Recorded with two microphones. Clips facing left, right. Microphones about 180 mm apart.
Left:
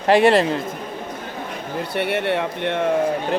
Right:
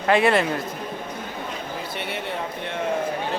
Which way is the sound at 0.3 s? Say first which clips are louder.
Left 4 dB; 35° left (ahead or behind).